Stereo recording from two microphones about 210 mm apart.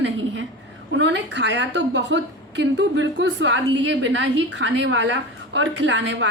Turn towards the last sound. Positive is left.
turn(degrees=-60)  # may be behind; listen again after turning